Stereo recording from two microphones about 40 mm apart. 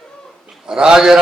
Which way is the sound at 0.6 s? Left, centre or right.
Centre.